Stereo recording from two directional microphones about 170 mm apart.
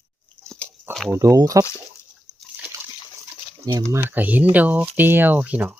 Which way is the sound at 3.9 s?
10° right (ahead or behind).